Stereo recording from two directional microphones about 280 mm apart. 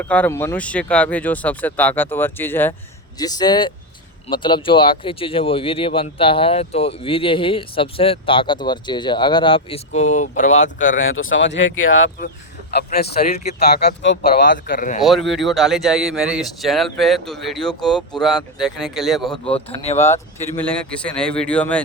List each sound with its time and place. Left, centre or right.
0.0 s speech: centre; by 10.9 s left
10.9 s speech: left
15.0 s speech: centre